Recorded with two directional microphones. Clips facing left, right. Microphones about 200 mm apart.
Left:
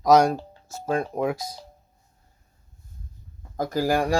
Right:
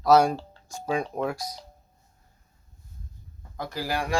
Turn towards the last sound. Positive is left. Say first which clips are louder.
# left 7 dB
turn(degrees=45)  # may be behind; listen again after turning